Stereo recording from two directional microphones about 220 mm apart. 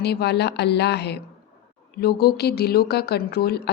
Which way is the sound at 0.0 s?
50° left (ahead or behind).